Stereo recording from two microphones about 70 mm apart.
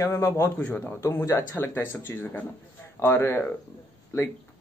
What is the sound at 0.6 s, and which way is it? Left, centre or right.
Speech, centre.